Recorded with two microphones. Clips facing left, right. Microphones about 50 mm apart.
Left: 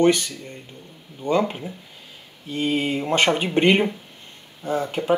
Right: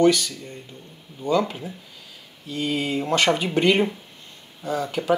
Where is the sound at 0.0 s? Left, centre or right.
Left.